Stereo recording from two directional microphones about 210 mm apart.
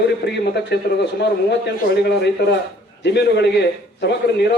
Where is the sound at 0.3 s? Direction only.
55° left (ahead or behind).